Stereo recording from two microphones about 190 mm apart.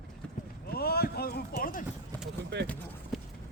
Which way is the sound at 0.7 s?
55° left (ahead or behind).